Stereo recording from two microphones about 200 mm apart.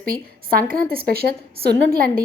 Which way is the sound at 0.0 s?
45° right (ahead or behind).